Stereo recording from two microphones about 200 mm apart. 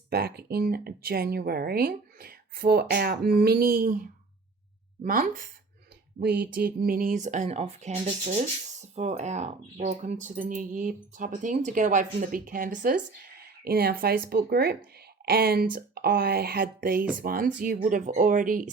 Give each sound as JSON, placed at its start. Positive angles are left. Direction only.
{"t": 0.1, "sound": "speech", "side_deg": -50}